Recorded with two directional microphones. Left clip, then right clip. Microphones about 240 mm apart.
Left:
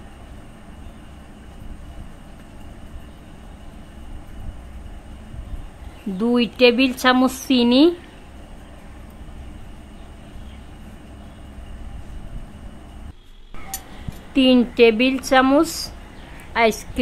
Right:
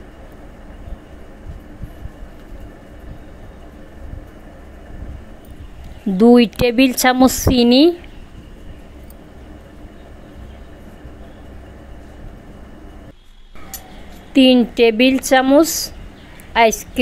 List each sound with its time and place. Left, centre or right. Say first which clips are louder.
6.1 s speech: right 9 dB; right
14.3 s a woman's voice: right 4 dB; centre